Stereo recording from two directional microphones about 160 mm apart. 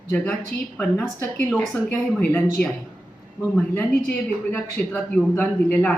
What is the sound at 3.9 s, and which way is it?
Speech, 70° left (ahead or behind).